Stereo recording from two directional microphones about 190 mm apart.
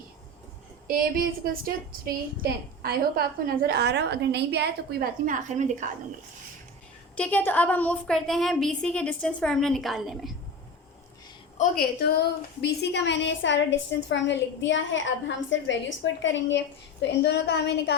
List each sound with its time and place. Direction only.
0.9 s a woman's voice: 50° right (ahead or behind)
7.2 s a woman's voice: 10° left (ahead or behind)
11.5 s a woman's voice: 45° left (ahead or behind); by 17.9 s 60° left (ahead or behind)